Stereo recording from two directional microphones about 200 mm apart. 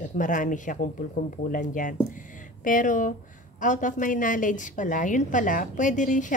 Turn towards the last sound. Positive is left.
turn(degrees=40)  # may be behind; listen again after turning